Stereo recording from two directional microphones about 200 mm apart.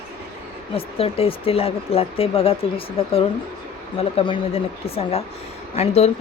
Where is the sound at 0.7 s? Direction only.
30° left (ahead or behind).